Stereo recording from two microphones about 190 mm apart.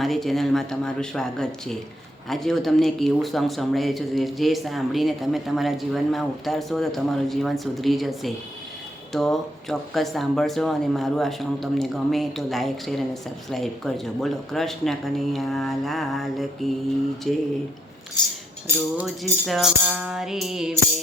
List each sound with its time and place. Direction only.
0.0 s speech: centre (ahead or behind)
18.2 s cutlery: 20° left (ahead or behind)
18.9 s speech: centre (ahead or behind)